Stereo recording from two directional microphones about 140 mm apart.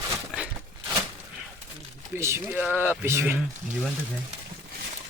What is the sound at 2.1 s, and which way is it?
Speech, 20° right (ahead or behind).